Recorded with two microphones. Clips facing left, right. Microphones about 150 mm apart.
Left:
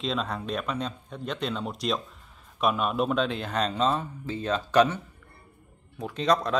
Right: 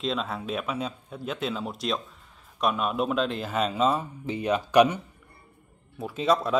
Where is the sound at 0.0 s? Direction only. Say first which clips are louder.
Even; centre (ahead or behind).